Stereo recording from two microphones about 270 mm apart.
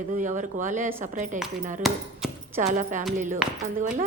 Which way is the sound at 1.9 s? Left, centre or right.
Centre.